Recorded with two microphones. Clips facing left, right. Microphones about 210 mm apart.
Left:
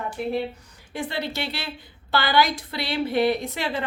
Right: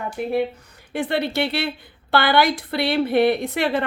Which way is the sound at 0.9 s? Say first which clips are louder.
Right 7 dB; 60° right (ahead or behind).